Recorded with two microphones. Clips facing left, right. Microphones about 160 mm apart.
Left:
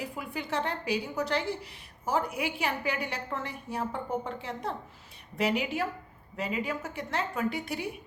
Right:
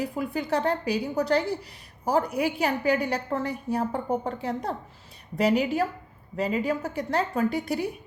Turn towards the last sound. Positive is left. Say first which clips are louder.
# right 6 dB
turn(degrees=-35)  # may be behind; listen again after turning